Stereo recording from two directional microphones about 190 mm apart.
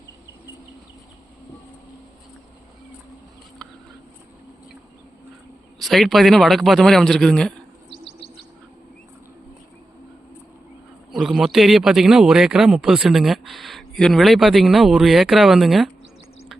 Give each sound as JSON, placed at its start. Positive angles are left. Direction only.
{"t": 5.8, "sound": "a man's voice", "side_deg": 0}
{"t": 7.9, "sound": "bird", "side_deg": 30}
{"t": 11.1, "sound": "a man's voice", "side_deg": 0}